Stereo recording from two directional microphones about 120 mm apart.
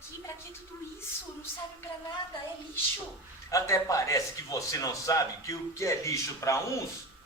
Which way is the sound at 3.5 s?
25° left (ahead or behind).